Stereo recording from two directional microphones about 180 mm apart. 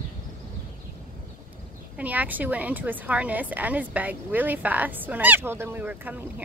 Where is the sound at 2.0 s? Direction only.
10° right (ahead or behind).